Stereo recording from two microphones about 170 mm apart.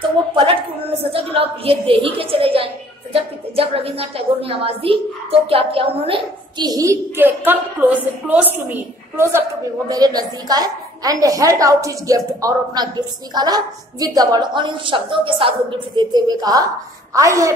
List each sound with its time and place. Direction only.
1.1 s a woman's voice: 35° right (ahead or behind); by 17.6 s 20° right (ahead or behind)